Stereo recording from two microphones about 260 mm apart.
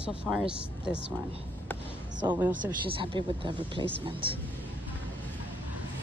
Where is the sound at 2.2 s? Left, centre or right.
Centre.